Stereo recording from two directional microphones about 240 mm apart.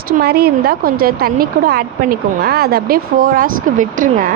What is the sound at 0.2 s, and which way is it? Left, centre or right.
Speech, right.